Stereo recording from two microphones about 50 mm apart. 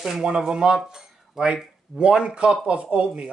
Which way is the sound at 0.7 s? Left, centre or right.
Centre.